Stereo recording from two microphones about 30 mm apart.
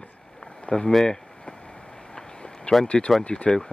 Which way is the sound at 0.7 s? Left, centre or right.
Left.